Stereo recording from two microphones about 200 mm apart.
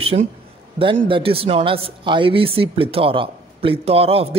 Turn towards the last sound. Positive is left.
turn(degrees=-30)  # may be behind; listen again after turning